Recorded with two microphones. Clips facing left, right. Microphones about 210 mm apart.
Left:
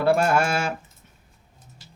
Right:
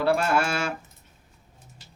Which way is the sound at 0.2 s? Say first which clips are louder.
Left 3 dB; 50° left (ahead or behind).